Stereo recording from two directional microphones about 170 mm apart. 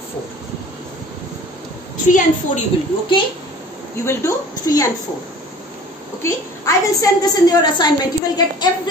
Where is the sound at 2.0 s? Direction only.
50° left (ahead or behind).